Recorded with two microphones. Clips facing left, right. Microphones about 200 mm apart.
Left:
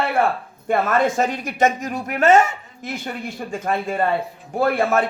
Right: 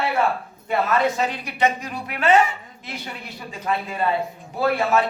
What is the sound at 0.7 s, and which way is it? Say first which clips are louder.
A woman's voice: left 2 dB; 50° left (ahead or behind).